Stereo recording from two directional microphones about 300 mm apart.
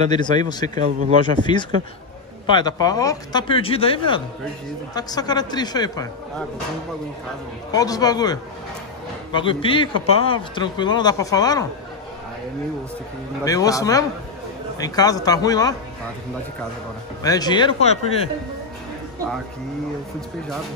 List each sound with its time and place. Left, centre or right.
0.1 s a man's voice: centre
0.7 s speech: right
1.2 s a man's voice: centre
7.7 s a man's voice: centre
13.4 s a man's voice: centre
17.2 s a man's voice: centre